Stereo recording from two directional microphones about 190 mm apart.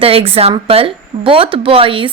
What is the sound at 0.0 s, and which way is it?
Speech, 30° right (ahead or behind).